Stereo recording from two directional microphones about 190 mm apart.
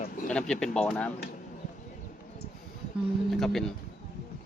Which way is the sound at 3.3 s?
Centre (ahead or behind).